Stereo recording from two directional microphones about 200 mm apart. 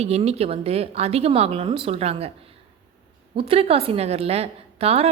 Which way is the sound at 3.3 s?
30° right (ahead or behind).